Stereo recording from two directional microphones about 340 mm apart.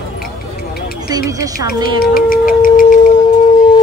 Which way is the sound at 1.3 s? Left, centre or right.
Centre.